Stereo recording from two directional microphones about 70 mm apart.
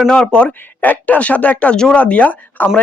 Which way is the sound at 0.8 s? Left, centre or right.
Left.